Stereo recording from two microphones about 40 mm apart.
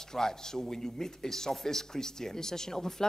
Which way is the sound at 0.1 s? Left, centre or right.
Centre.